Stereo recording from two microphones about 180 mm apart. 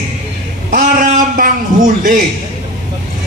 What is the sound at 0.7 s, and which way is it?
A man's voice, 45° right (ahead or behind).